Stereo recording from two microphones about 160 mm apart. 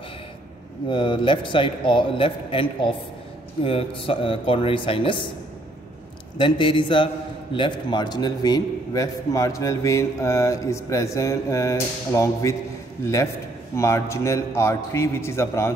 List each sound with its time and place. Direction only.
0.8 s a man's voice: 30° left (ahead or behind)
6.3 s a man's voice: 30° left (ahead or behind)